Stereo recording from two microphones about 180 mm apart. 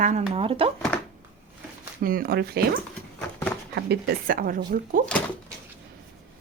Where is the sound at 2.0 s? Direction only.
50° right (ahead or behind).